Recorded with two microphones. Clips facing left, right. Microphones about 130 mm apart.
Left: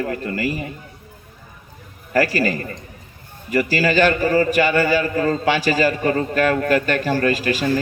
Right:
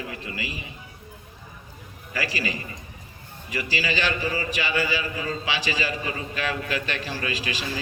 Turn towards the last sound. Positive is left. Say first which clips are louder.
# left 11 dB
turn(degrees=50)  # may be behind; listen again after turning